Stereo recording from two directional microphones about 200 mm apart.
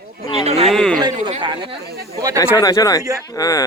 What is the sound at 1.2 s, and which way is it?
Speech, 25° right (ahead or behind).